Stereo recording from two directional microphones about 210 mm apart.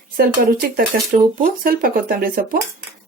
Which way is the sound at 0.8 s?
40° right (ahead or behind).